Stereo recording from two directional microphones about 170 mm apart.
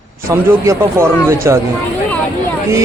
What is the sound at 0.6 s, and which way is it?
Speech, 15° right (ahead or behind).